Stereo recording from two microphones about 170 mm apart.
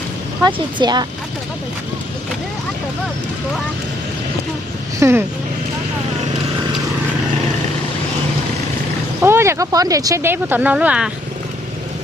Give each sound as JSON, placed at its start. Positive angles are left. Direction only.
{"t": 0.4, "sound": "speech", "side_deg": -25}
{"t": 4.9, "sound": "speech", "side_deg": -15}
{"t": 9.2, "sound": "speech", "side_deg": -15}